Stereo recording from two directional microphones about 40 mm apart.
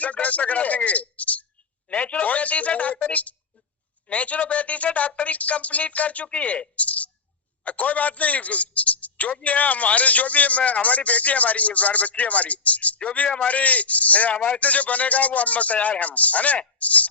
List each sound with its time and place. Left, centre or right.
0.0 s a man's voice: left